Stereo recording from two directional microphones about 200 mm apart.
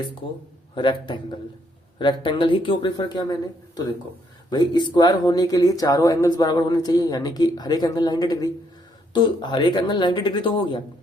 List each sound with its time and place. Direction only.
0.8 s speech: 25° left (ahead or behind)
4.4 s speech: 20° left (ahead or behind)